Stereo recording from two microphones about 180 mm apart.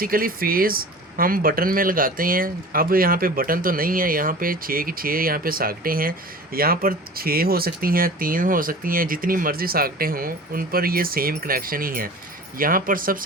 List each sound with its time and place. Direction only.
0.0 s speech: 55° right (ahead or behind)